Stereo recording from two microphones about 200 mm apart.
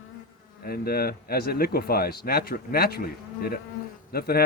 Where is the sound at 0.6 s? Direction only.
50° left (ahead or behind).